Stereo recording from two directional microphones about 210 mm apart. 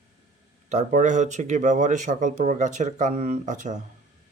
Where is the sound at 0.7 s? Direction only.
35° right (ahead or behind).